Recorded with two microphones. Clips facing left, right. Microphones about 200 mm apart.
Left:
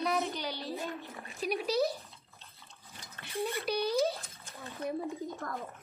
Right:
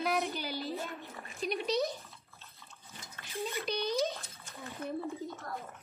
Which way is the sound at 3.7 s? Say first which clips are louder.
Left 3 dB; 10° left (ahead or behind).